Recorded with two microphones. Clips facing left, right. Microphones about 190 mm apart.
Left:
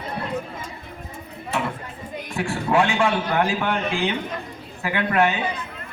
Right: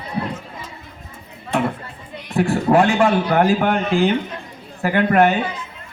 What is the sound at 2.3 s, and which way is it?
A man's voice, 40° right (ahead or behind).